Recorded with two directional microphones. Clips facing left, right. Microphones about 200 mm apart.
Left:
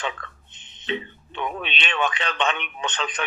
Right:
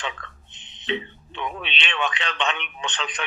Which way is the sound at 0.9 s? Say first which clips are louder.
Left 1 dB; 45° left (ahead or behind).